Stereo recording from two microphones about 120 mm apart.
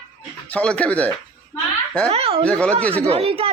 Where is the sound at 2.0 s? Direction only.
55° right (ahead or behind).